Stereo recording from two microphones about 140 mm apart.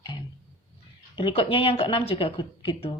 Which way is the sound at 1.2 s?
40° left (ahead or behind).